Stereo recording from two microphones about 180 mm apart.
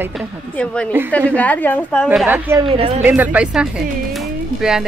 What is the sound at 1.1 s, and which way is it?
Speech, 10° left (ahead or behind).